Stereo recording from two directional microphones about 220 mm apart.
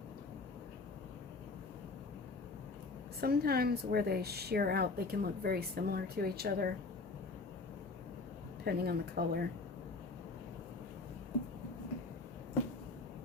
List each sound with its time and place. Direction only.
3.2 s a woman's voice: 45° right (ahead or behind)
8.6 s a woman's voice: 45° right (ahead or behind)